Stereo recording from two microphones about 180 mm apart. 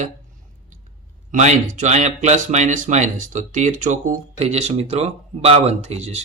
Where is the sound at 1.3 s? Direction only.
40° right (ahead or behind).